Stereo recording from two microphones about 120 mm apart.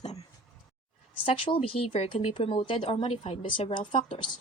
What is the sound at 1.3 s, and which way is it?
Speech, 50° left (ahead or behind).